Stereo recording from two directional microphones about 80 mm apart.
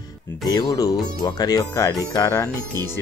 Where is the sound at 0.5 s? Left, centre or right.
Left.